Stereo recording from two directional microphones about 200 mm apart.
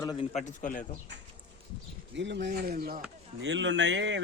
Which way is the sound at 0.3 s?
40° left (ahead or behind).